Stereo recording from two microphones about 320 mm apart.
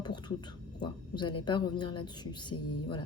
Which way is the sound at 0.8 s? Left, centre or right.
Centre.